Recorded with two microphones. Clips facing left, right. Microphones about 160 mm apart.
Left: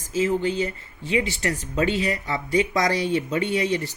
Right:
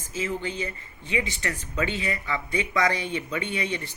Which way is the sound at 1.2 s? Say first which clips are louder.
Left 5 dB; 35° left (ahead or behind).